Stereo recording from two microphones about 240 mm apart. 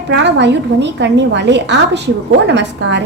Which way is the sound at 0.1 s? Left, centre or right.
Right.